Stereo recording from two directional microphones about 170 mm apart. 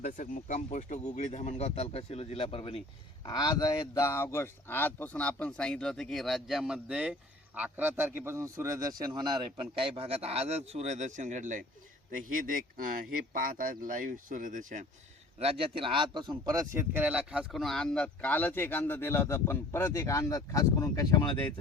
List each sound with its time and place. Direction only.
0.0 s speech: 50° left (ahead or behind); by 14.8 s 50° right (ahead or behind)
15.4 s speech: 35° right (ahead or behind); by 21.3 s 20° left (ahead or behind)